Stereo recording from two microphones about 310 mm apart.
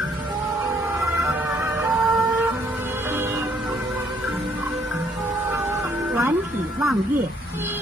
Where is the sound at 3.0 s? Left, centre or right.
Centre.